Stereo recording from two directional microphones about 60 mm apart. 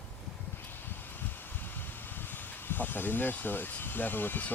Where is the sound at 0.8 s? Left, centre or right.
Left.